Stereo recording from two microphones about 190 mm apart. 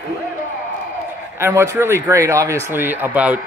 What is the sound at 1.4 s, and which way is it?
Speech, 15° right (ahead or behind).